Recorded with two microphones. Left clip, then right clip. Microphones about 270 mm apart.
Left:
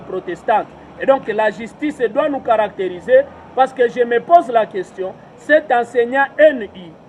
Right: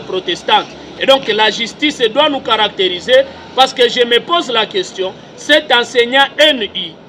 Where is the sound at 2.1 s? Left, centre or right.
Centre.